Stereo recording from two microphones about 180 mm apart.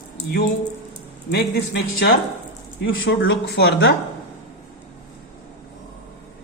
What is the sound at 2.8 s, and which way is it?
Speech, 85° left.